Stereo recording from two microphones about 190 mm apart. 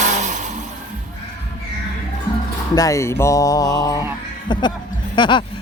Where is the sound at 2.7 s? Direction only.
20° left (ahead or behind).